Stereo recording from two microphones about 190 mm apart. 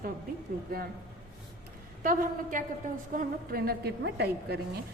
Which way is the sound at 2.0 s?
45° right (ahead or behind).